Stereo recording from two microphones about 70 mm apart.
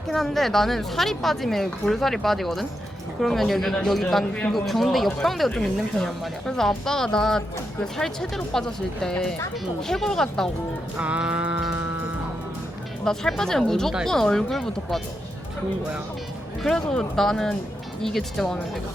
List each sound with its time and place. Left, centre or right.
0.1 s a woman's voice: centre
10.9 s music: centre
13.1 s speech: centre
16.9 s a woman's voice: centre